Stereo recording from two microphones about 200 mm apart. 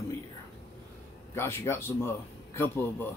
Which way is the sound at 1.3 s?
10° left (ahead or behind).